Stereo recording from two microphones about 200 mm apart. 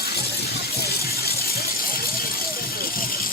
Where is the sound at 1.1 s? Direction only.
50° left (ahead or behind).